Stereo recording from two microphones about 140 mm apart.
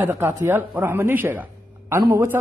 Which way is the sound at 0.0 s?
15° right (ahead or behind).